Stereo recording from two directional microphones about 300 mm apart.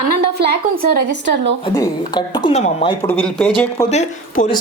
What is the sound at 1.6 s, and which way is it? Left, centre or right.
Speech, centre.